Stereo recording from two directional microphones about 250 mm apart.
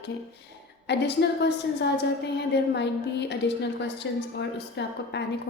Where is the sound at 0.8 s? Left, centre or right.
Left.